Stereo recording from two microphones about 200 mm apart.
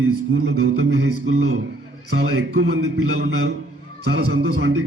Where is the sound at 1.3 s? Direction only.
90° right.